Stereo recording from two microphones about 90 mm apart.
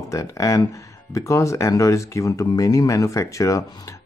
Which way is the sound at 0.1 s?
35° left (ahead or behind).